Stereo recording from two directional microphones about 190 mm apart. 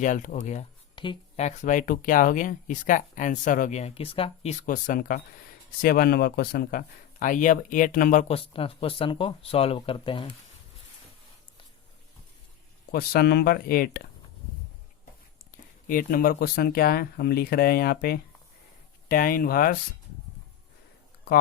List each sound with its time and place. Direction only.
0.0 s speech: 40° left (ahead or behind)
12.9 s speech: 55° left (ahead or behind)
15.9 s speech: 50° left (ahead or behind)